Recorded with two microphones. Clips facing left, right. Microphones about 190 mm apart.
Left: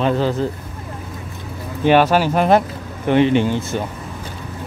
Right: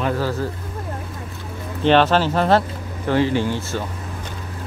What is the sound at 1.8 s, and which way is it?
Speech, 10° left (ahead or behind).